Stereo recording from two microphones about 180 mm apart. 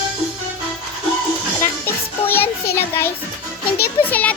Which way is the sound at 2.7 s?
15° left (ahead or behind).